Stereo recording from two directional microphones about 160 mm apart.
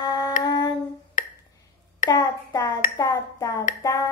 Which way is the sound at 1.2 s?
55° left (ahead or behind).